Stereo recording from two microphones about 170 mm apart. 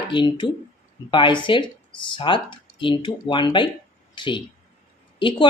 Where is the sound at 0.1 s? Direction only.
30° left (ahead or behind).